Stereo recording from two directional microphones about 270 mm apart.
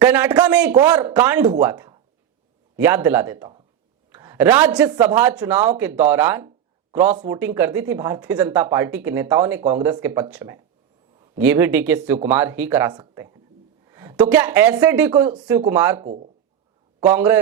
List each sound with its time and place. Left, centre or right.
0.0 s a woman's voice: centre
16.0 s speech: right
17.0 s speech: centre